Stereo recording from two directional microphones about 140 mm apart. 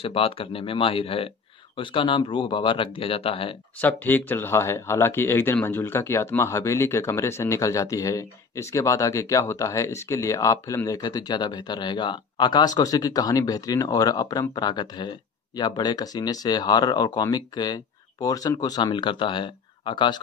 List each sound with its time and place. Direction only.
0.0 s speech: 40° left (ahead or behind)
3.7 s speech: 10° left (ahead or behind); by 20.2 s 35° left (ahead or behind)